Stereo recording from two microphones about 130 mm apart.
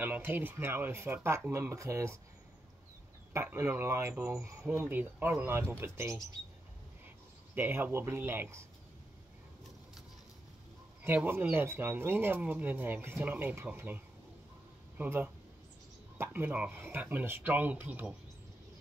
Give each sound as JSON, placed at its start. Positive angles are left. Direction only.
{"t": 0.0, "sound": "speech", "side_deg": -15}
{"t": 3.5, "sound": "speech", "side_deg": -20}
{"t": 7.5, "sound": "speech", "side_deg": -15}
{"t": 11.0, "sound": "speech", "side_deg": -15}